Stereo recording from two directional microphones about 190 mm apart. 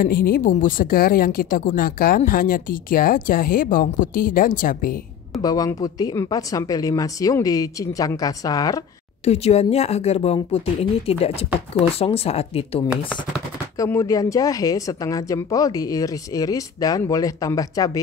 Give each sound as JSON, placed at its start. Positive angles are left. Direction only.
{"t": 0.0, "sound": "speech", "side_deg": 50}
{"t": 5.4, "sound": "a woman's voice", "side_deg": 20}
{"t": 9.2, "sound": "speech", "side_deg": 35}
{"t": 13.7, "sound": "speech", "side_deg": 15}